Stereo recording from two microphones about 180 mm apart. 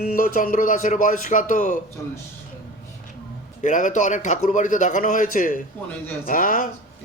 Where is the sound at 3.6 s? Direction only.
45° left (ahead or behind).